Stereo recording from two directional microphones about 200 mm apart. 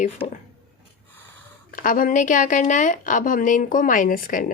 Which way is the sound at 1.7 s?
45° left (ahead or behind).